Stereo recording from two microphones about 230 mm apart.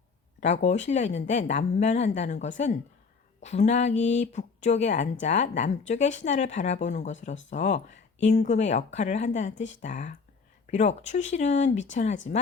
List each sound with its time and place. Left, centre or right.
0.3 s speech: left